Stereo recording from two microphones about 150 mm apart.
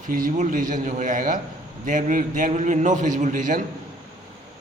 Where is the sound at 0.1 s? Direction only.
65° right (ahead or behind).